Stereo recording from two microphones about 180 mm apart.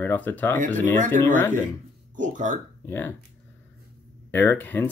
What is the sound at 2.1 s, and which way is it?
Speech, 45° right (ahead or behind).